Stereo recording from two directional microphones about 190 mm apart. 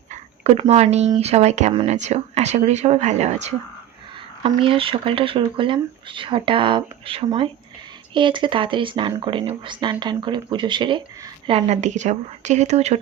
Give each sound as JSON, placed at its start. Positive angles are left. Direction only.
{"t": 0.4, "sound": "speech", "side_deg": -35}
{"t": 4.4, "sound": "speech", "side_deg": -25}